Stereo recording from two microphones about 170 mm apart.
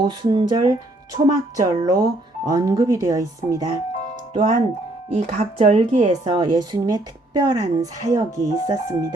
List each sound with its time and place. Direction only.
0.0 s speech: 25° right (ahead or behind)
5.1 s speech: 40° right (ahead or behind)
6.2 s speech: 25° right (ahead or behind)